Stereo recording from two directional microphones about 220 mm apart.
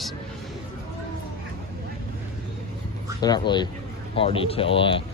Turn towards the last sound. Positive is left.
turn(degrees=25)  # may be behind; listen again after turning